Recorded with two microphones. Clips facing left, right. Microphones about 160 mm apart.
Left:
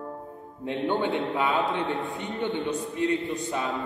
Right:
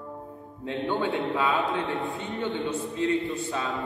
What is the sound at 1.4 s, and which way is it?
A man's voice, 20° left (ahead or behind).